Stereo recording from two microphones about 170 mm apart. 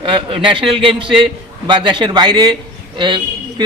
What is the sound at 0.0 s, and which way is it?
A man's voice, 30° right (ahead or behind).